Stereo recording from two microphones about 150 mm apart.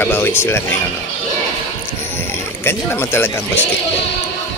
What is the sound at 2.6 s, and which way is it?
Speech, 15° left (ahead or behind).